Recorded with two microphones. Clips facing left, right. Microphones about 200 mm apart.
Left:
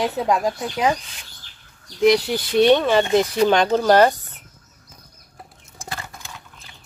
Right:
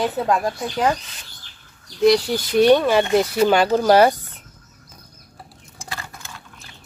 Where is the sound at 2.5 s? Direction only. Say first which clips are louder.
Right 1 dB; 10° right (ahead or behind).